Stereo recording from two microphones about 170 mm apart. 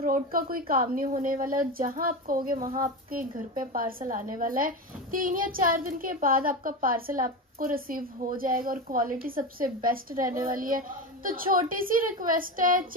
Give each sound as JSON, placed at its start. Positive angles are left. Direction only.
{"t": 0.0, "sound": "a woman's voice", "side_deg": -55}